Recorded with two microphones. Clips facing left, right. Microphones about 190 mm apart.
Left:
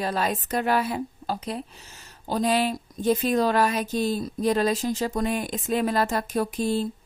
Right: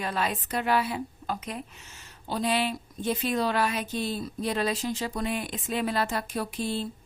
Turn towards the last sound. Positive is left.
turn(degrees=45)  # may be behind; listen again after turning